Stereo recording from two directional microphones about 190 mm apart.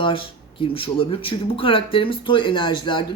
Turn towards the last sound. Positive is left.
turn(degrees=25)  # may be behind; listen again after turning